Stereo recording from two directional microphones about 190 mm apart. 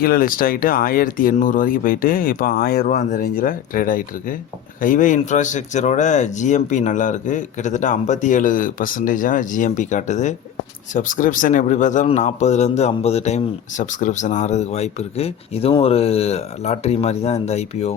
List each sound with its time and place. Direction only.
0.0 s a man's voice: 50° left (ahead or behind); by 17.9 s 35° left (ahead or behind)